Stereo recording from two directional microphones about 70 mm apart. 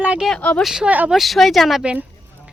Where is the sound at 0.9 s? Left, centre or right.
Right.